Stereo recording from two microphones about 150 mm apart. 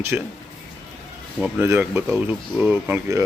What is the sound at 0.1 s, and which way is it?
Speech, 10° right (ahead or behind).